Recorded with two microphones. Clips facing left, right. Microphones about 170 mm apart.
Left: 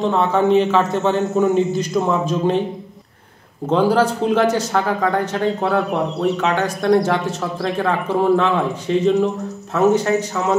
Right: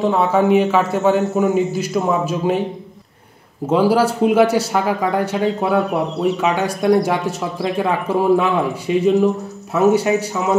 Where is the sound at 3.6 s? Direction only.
10° right (ahead or behind).